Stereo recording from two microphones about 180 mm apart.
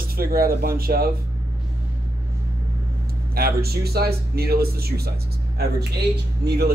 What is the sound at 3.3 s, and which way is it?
Speech, 60° right (ahead or behind).